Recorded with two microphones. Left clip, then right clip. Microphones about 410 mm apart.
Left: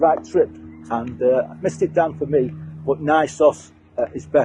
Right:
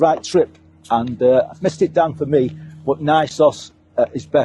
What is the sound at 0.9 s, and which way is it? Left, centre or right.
Speech, right.